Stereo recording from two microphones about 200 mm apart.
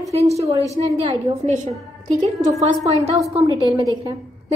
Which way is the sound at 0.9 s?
25° right (ahead or behind).